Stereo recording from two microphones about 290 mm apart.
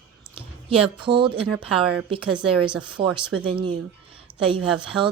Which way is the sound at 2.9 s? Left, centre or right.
Centre.